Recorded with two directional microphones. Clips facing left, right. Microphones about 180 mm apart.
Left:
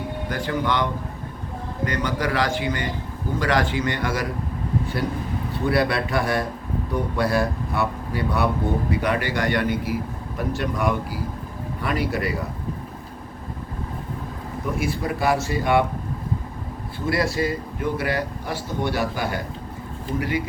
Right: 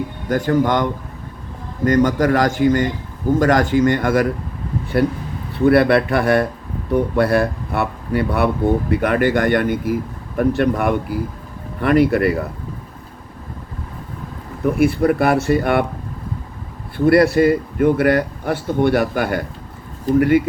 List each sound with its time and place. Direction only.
0.3 s a man's voice: 45° right (ahead or behind)
14.8 s a man's voice: 60° right (ahead or behind)
17.1 s a man's voice: 60° right (ahead or behind)